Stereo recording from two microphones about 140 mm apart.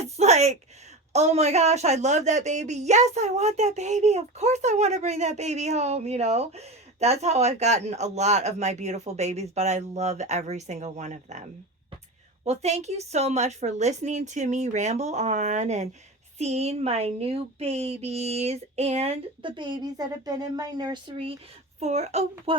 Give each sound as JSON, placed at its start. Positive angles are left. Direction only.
{"t": 0.2, "sound": "a sound", "side_deg": -50}
{"t": 1.1, "sound": "speech", "side_deg": -50}
{"t": 12.5, "sound": "a woman's voice", "side_deg": -50}
{"t": 21.8, "sound": "speech", "side_deg": -50}